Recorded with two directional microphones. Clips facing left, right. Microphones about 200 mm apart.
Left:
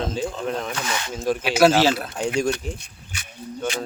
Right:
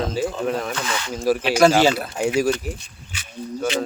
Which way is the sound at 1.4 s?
5° left (ahead or behind).